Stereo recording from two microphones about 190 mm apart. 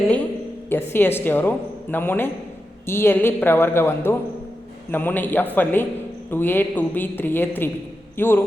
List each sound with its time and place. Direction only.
0.7 s a woman's voice: 10° left (ahead or behind)